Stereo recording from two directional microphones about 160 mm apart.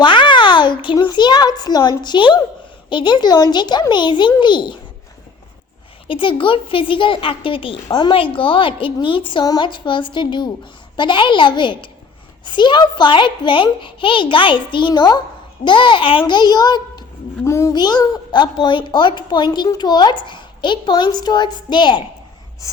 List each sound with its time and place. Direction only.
0.0 s a child's voice: 30° left (ahead or behind)
6.1 s a woman's voice: 30° left (ahead or behind)